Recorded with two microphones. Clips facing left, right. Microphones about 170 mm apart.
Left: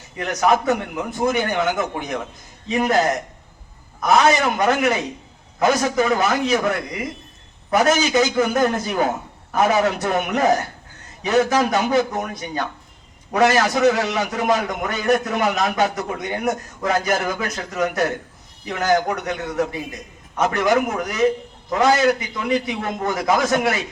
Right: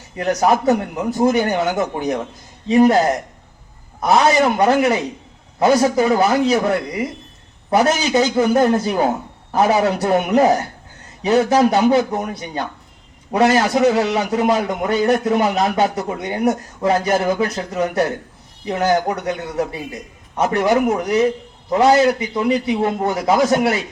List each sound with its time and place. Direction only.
0.2 s a man's voice: 35° right (ahead or behind)
4.0 s a man's voice: 30° right (ahead or behind)